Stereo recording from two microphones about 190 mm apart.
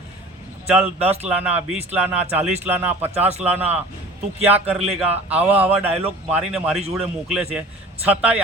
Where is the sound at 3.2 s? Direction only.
35° right (ahead or behind).